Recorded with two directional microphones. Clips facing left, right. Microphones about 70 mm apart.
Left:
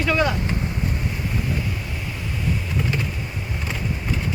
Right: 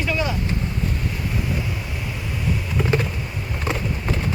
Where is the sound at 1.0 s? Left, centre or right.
Centre.